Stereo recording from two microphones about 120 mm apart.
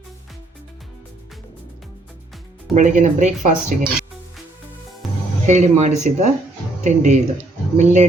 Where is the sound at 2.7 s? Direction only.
90° right.